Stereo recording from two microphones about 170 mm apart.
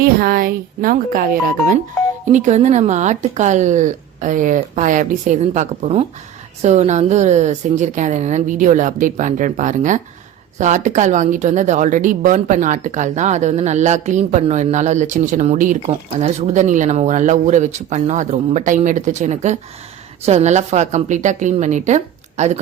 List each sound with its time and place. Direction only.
0.0 s a woman's voice: 60° right (ahead or behind)
2.3 s a woman's voice: 45° right (ahead or behind)